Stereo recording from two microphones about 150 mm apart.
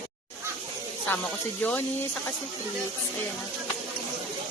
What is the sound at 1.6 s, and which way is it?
Speech, 10° left (ahead or behind).